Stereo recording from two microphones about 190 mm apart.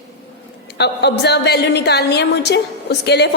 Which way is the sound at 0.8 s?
60° left (ahead or behind).